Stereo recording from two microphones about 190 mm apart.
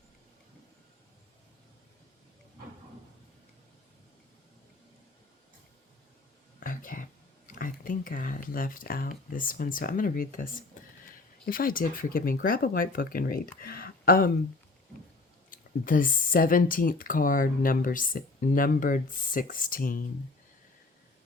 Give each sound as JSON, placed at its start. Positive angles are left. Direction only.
{"t": 6.6, "sound": "speech", "side_deg": 45}
{"t": 15.4, "sound": "speech", "side_deg": 45}